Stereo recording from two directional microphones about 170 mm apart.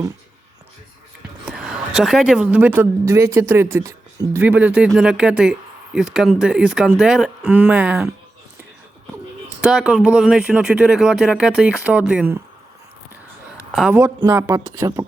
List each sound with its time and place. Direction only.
1.5 s a woman's voice: 5° right (ahead or behind)
9.6 s speech: 5° right (ahead or behind)
13.7 s a woman's voice: 5° right (ahead or behind)
14.0 s a woman's voice: 15° right (ahead or behind)